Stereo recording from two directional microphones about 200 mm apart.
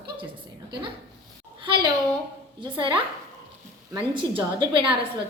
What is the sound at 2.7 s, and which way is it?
Speech, 25° right (ahead or behind).